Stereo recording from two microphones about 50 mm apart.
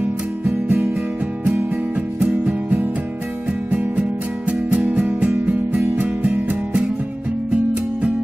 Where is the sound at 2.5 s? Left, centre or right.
Right.